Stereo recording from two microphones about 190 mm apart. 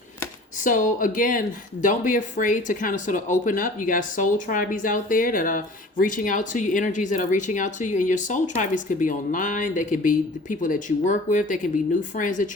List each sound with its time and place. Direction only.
0.6 s speech: 40° left (ahead or behind)